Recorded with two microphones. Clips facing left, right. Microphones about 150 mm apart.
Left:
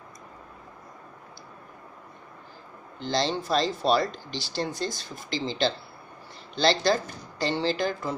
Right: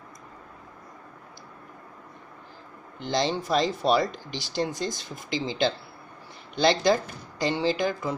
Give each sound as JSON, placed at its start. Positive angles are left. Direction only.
{"t": 3.0, "sound": "speech", "side_deg": -15}